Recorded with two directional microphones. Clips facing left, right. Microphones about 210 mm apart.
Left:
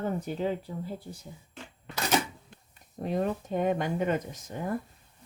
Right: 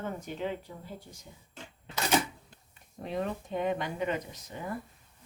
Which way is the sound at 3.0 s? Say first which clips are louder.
Left 4 dB; 40° left (ahead or behind).